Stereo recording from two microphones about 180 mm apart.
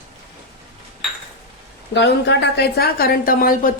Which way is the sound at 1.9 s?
75° left (ahead or behind).